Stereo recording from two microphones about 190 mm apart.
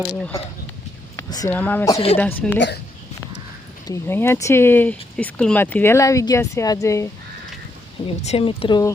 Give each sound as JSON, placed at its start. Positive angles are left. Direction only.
{"t": 0.0, "sound": "speech", "side_deg": 10}
{"t": 1.1, "sound": "a sound", "side_deg": 15}
{"t": 1.5, "sound": "speech", "side_deg": 10}
{"t": 3.8, "sound": "speech", "side_deg": 10}
{"t": 8.0, "sound": "speech", "side_deg": 30}